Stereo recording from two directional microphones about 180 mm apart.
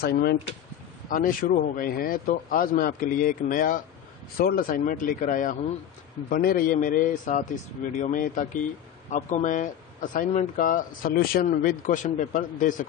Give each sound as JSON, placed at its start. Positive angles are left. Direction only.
{"t": 0.0, "sound": "speech", "side_deg": 60}